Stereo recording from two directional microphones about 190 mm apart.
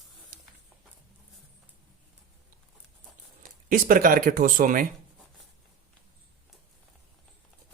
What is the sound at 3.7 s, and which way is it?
Speech, 45° right (ahead or behind).